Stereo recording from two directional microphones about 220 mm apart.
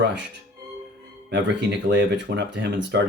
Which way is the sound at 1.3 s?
50° right (ahead or behind).